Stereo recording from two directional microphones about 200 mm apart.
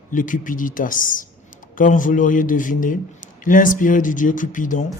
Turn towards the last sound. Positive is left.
turn(degrees=40)  # may be behind; listen again after turning